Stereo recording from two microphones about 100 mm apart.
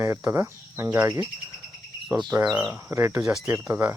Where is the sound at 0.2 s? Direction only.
20° right (ahead or behind).